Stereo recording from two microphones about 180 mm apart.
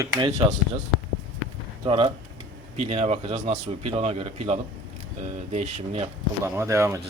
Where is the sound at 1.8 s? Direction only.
30° right (ahead or behind).